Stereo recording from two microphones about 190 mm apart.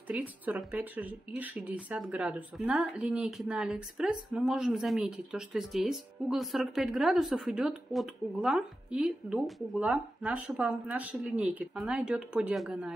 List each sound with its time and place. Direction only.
0.1 s speech: 5° right (ahead or behind)